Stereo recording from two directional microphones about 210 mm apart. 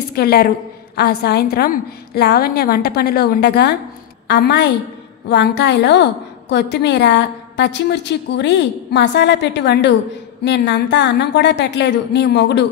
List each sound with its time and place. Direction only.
0.1 s a woman's voice: 45° left (ahead or behind)